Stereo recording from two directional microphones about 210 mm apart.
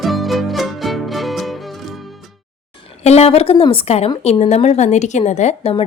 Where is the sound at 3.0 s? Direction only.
30° left (ahead or behind).